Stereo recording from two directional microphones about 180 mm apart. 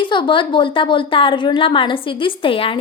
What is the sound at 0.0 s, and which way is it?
A woman's voice, 25° left (ahead or behind).